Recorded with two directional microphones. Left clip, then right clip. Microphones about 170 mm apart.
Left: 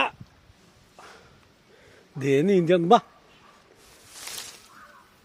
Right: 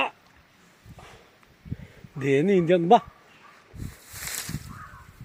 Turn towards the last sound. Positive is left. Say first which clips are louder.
# right 3 dB
turn(degrees=-30)  # may be behind; listen again after turning